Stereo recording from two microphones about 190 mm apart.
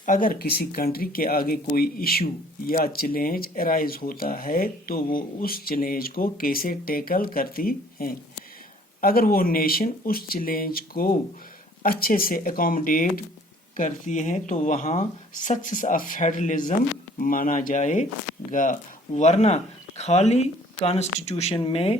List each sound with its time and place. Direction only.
0.0 s speech: 45° left (ahead or behind)